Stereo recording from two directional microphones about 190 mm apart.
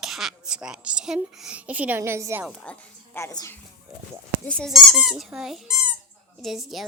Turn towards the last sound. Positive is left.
turn(degrees=0)  # may be behind; listen again after turning